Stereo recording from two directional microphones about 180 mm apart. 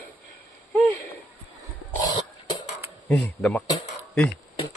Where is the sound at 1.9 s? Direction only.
20° left (ahead or behind).